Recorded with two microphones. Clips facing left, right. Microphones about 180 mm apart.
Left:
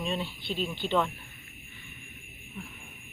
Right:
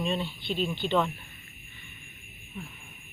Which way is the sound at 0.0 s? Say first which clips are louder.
Right 2 dB; 5° left (ahead or behind).